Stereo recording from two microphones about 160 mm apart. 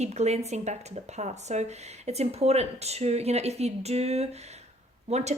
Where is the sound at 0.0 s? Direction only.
45° right (ahead or behind).